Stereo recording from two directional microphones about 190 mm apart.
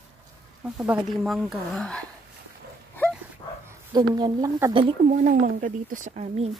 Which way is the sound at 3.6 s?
20° right (ahead or behind).